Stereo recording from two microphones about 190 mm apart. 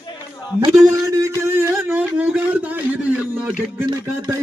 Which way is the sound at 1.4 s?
15° right (ahead or behind).